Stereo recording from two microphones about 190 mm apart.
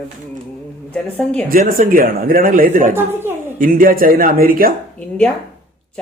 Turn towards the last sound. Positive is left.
turn(degrees=5)  # may be behind; listen again after turning